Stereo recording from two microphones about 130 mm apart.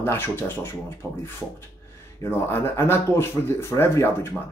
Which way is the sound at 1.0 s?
10° right (ahead or behind).